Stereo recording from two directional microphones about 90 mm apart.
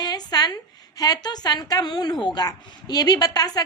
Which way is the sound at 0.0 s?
45° left (ahead or behind).